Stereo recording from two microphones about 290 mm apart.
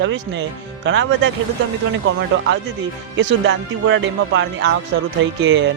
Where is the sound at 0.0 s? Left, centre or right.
Right.